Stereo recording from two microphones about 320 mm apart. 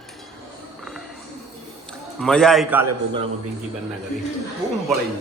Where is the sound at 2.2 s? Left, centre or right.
Centre.